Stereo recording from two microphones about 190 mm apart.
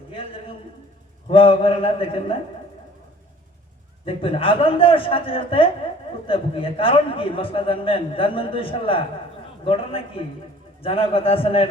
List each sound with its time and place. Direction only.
0.1 s a sound: 30° left (ahead or behind)
1.3 s a man's voice: 30° left (ahead or behind)
4.0 s a man's voice: 30° left (ahead or behind)